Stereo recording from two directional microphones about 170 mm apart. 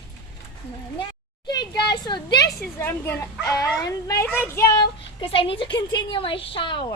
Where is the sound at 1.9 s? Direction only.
25° left (ahead or behind).